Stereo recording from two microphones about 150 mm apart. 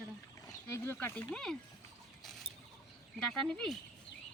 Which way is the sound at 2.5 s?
45° left (ahead or behind).